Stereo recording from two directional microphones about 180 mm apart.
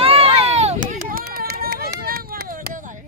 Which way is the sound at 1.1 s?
55° right (ahead or behind).